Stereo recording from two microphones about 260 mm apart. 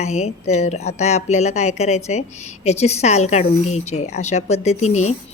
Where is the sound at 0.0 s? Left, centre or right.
Left.